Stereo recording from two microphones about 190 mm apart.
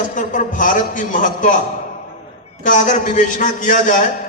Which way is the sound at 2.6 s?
40° left (ahead or behind).